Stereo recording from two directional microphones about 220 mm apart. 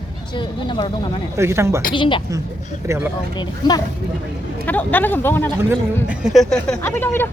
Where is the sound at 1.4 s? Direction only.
10° right (ahead or behind).